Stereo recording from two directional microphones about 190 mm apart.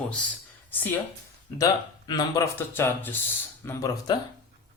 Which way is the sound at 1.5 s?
20° left (ahead or behind).